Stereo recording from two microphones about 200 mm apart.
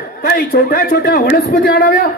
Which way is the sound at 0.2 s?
45° left (ahead or behind).